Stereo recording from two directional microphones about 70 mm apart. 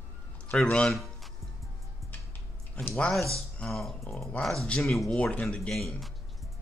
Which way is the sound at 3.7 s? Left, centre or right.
Centre.